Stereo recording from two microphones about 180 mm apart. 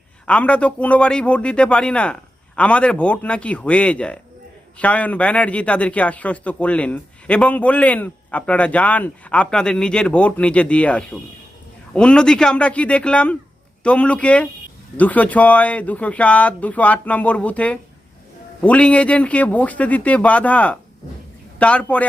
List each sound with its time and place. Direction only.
0.3 s a man's voice: 5° left (ahead or behind)